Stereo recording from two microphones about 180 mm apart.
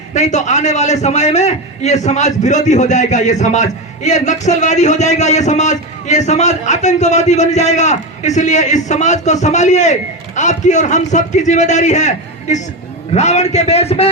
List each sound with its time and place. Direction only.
0.1 s a man's voice: 40° left (ahead or behind)